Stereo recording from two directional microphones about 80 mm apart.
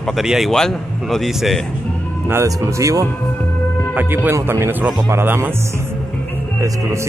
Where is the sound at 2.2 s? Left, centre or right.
Right.